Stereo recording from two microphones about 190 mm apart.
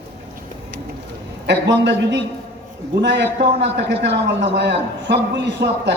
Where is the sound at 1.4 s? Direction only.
65° right (ahead or behind).